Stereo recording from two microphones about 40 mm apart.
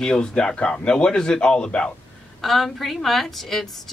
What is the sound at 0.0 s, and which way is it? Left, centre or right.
Speech, centre.